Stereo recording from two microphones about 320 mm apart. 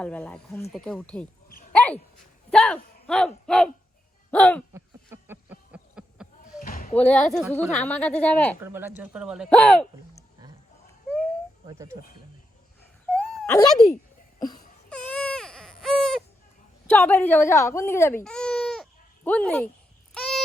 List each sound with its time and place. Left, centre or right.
0.0 s speech: centre
1.7 s a sound: centre
2.5 s speech: centre
4.7 s a sound: centre
6.6 s a sound: left
6.9 s speech: centre
8.6 s speech: centre
11.6 s speech: centre
13.1 s a sound: centre
14.8 s baby cry: centre
16.8 s speech: centre
20.1 s wail: centre